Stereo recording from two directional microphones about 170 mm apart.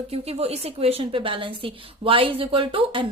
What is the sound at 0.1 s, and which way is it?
Speech, 35° right (ahead or behind).